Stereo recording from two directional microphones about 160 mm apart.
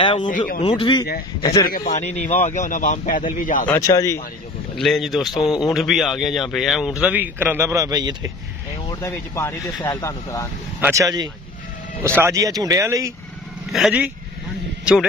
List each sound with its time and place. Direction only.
0.0 s a man's voice: 30° left (ahead or behind)
1.7 s a man's voice: 55° left (ahead or behind)
3.7 s speech: 20° left (ahead or behind)
4.7 s speech: centre (ahead or behind)
5.4 s speech: 25° left (ahead or behind)
5.7 s speech: centre (ahead or behind); by 8.3 s 25° right (ahead or behind)
8.8 s speech: 15° left (ahead or behind)
10.8 s speech: 20° right (ahead or behind)
13.7 s speech: centre (ahead or behind)